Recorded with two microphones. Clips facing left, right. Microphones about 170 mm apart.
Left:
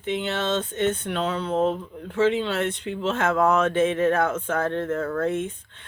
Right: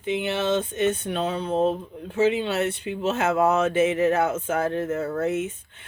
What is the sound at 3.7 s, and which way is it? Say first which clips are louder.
Speech: even; 15° right (ahead or behind).